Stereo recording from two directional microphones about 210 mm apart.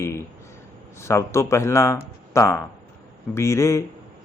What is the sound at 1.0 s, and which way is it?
A man's voice, 15° left (ahead or behind).